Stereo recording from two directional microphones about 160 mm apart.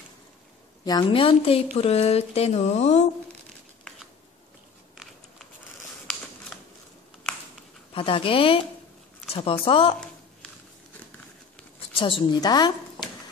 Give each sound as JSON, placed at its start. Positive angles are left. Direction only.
{"t": 0.8, "sound": "speech", "side_deg": 30}
{"t": 7.9, "sound": "speech", "side_deg": 35}
{"t": 11.9, "sound": "speech", "side_deg": 35}